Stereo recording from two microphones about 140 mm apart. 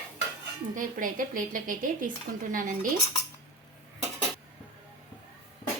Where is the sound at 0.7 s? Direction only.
70° right (ahead or behind).